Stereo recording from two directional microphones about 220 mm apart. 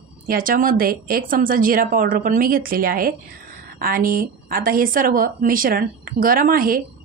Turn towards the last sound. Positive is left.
turn(degrees=-40)  # may be behind; listen again after turning